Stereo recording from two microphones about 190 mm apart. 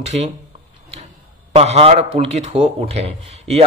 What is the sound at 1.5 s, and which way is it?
Speech, 30° right (ahead or behind).